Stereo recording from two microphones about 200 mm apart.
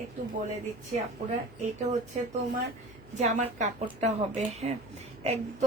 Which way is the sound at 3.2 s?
35° right (ahead or behind).